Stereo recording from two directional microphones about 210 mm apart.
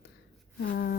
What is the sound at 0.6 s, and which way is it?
Speech, 50° left (ahead or behind).